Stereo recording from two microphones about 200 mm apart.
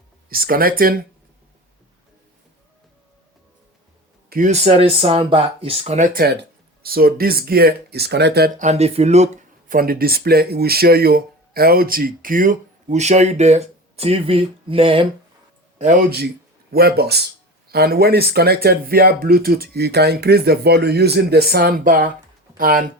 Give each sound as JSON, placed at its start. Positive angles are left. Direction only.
{"t": 0.3, "sound": "speech", "side_deg": -45}
{"t": 4.3, "sound": "speech", "side_deg": -40}
{"t": 6.8, "sound": "speech", "side_deg": -50}
{"t": 15.8, "sound": "speech", "side_deg": -45}